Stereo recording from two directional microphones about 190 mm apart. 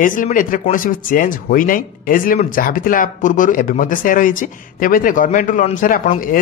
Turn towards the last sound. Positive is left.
turn(degrees=45)  # may be behind; listen again after turning